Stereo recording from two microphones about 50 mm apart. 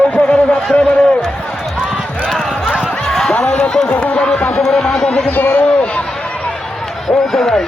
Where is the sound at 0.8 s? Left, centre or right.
Left.